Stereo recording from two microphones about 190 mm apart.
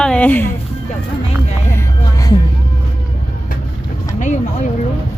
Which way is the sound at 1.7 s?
20° left (ahead or behind).